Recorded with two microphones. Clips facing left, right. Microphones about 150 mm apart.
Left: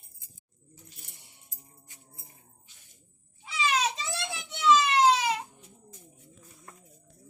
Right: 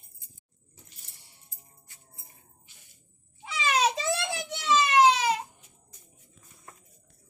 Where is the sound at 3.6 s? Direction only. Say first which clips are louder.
Right 4 dB; 55° right (ahead or behind).